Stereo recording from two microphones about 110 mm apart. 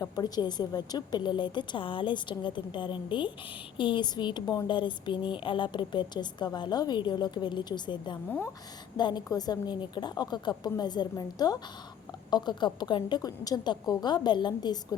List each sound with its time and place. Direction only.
0.0 s a woman's voice: 40° left (ahead or behind)